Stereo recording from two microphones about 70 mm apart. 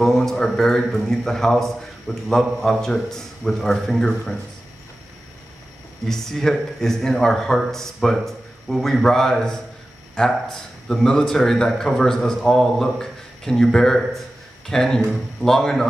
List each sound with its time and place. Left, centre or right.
0.0 s a man's voice: centre
6.0 s a man's voice: centre